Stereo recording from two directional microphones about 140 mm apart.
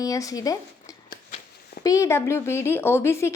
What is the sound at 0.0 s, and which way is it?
A woman's voice, 25° left (ahead or behind).